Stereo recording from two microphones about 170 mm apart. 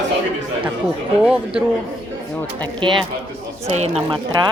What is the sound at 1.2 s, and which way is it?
Speech, 5° right (ahead or behind).